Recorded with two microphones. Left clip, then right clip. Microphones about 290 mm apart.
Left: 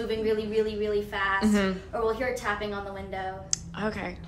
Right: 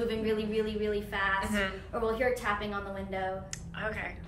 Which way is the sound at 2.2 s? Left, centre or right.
Centre.